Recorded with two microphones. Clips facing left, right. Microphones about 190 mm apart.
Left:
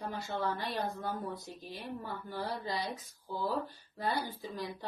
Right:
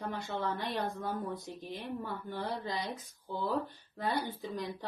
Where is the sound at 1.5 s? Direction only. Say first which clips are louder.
Right 3 dB; 25° right (ahead or behind).